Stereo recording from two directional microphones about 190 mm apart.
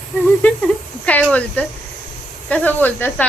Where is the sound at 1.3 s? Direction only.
5° left (ahead or behind).